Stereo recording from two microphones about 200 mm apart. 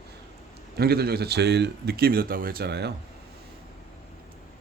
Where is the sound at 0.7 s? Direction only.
50° right (ahead or behind).